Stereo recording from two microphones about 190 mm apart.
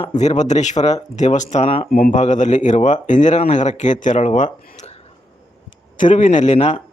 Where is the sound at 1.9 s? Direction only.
45° left (ahead or behind).